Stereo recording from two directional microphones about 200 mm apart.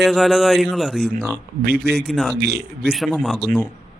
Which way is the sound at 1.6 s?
50° right (ahead or behind).